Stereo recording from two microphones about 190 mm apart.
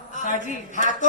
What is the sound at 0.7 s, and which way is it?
Speech, 40° left (ahead or behind).